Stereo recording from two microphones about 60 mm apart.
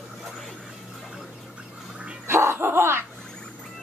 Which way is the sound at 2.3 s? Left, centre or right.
Right.